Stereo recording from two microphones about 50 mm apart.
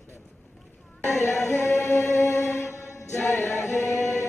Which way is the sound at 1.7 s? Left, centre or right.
Left.